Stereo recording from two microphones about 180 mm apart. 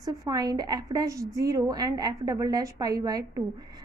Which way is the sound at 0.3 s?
20° right (ahead or behind).